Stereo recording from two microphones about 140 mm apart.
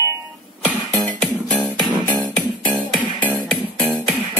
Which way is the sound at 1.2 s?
10° left (ahead or behind).